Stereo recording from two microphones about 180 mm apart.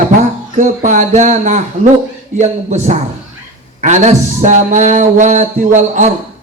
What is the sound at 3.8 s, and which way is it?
Music, 40° right (ahead or behind).